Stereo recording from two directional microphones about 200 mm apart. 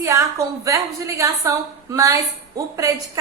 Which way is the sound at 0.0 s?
15° right (ahead or behind).